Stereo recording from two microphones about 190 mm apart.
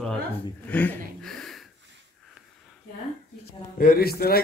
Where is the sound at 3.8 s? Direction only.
50° left (ahead or behind).